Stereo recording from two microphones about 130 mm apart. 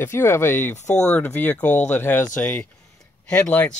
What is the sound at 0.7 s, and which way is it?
Speech, 65° left (ahead or behind).